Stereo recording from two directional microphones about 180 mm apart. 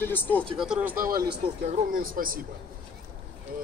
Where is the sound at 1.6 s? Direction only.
45° right (ahead or behind).